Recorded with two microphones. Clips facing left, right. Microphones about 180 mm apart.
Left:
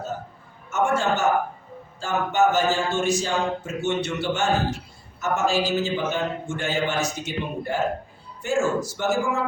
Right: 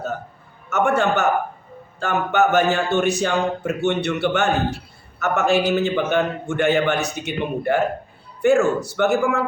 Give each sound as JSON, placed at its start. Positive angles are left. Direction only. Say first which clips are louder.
{"t": 0.7, "sound": "a man's voice", "louder": "right 4 dB", "side_deg": -60}